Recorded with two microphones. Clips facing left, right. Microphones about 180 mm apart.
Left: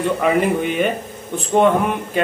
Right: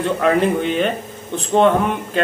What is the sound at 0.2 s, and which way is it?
Speech, 10° left (ahead or behind).